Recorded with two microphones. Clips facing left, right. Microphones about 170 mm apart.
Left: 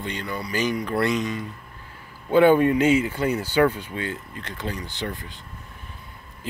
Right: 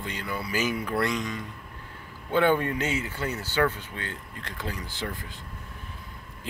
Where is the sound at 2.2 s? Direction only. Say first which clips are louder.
Left 7 dB; 10° left (ahead or behind).